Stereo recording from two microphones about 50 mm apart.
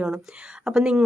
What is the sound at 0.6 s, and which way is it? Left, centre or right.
Speech, centre.